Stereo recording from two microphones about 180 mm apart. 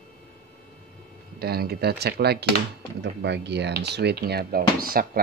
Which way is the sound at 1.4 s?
60° right (ahead or behind).